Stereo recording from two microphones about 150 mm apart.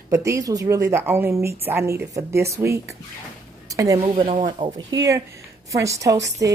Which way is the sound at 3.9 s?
40° right (ahead or behind).